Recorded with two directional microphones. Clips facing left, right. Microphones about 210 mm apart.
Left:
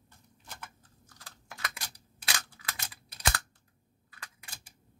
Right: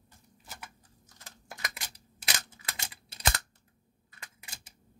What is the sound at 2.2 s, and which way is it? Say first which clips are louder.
Scissors: even; 20° right (ahead or behind).